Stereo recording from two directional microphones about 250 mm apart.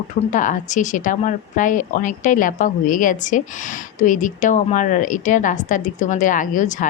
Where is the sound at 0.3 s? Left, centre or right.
Left.